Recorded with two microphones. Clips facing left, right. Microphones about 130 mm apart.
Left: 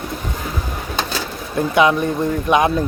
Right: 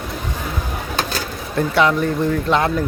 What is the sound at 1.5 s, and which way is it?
Speech, 15° left (ahead or behind).